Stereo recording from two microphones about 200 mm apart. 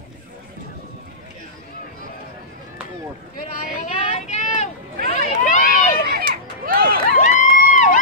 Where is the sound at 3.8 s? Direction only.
35° left (ahead or behind).